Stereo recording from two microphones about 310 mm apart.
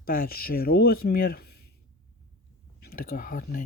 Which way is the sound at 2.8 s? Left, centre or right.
Left.